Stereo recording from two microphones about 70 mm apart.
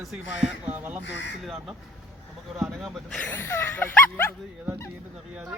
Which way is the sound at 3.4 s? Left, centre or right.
Left.